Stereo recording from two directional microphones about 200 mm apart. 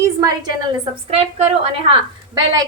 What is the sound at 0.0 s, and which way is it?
Speech, 15° right (ahead or behind).